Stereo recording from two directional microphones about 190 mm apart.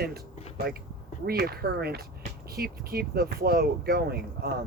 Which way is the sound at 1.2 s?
55° right (ahead or behind).